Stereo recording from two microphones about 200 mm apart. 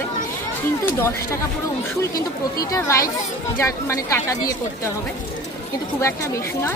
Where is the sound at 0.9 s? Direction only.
10° left (ahead or behind).